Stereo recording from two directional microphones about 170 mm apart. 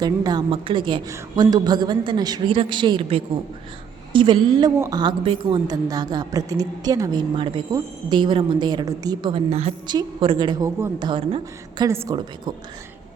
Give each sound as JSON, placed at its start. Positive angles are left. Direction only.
{"t": 0.0, "sound": "a woman's voice", "side_deg": -25}
{"t": 9.8, "sound": "a woman's voice", "side_deg": -25}
{"t": 11.9, "sound": "a woman's voice", "side_deg": -15}